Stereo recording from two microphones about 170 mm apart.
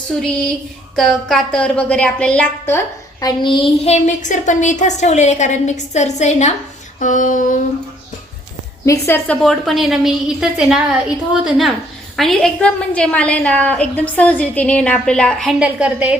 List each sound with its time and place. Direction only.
0.9 s a woman's voice: 5° left (ahead or behind); by 6.5 s 40° left (ahead or behind)
7.0 s female singing: 50° left (ahead or behind)
8.9 s a woman's voice: 15° left (ahead or behind); by 16.1 s 5° right (ahead or behind)